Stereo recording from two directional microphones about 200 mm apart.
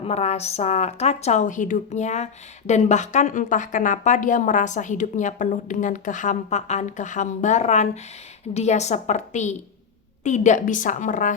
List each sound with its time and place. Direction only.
0.0 s speech: 30° left (ahead or behind)